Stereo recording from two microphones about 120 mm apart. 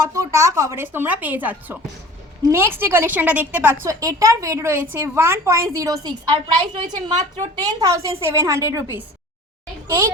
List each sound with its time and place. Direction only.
0.0 s a woman's voice: 25° right (ahead or behind)
3.8 s a woman's voice: 25° right (ahead or behind)